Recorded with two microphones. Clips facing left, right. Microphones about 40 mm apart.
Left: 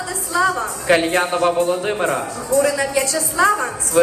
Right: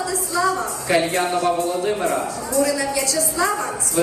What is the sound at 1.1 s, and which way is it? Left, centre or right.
A man's voice, left.